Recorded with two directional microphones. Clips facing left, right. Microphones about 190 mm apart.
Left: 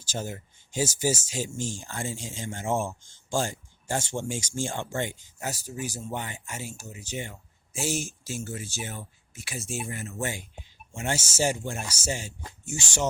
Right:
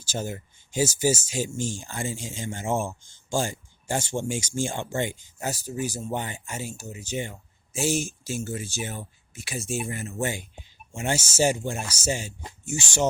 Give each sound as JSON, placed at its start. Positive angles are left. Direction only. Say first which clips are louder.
{"t": 0.0, "sound": "speech", "louder": "right 2 dB", "side_deg": -10}
{"t": 5.4, "sound": "speech", "louder": "right 4 dB", "side_deg": -25}
{"t": 8.4, "sound": "speech", "louder": "right 4 dB", "side_deg": -25}